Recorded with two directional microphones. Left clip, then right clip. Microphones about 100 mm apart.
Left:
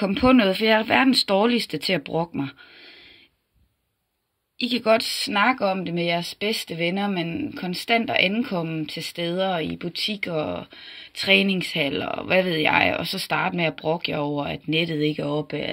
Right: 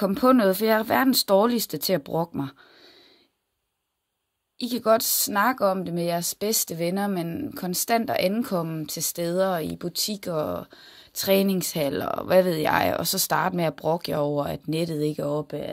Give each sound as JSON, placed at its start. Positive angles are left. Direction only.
{"t": 0.0, "sound": "speech", "side_deg": -20}
{"t": 4.8, "sound": "speech", "side_deg": -25}
{"t": 14.8, "sound": "speech", "side_deg": -25}
{"t": 15.4, "sound": "speech", "side_deg": 0}